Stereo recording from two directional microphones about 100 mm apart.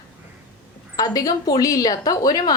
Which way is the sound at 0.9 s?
35° left (ahead or behind).